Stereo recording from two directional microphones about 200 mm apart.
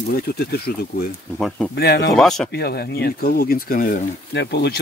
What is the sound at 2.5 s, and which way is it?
Speech, 50° left (ahead or behind).